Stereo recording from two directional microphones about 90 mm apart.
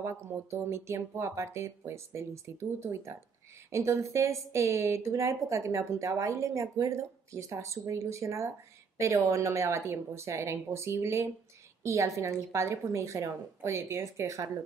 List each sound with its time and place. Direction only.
0.0 s a woman's voice: 30° right (ahead or behind)